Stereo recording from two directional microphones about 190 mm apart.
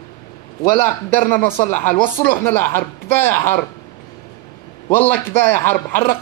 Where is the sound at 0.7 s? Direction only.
45° left (ahead or behind).